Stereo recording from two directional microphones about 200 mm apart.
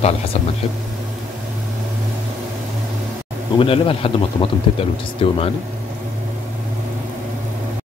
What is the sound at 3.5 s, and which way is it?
Speech, 25° left (ahead or behind).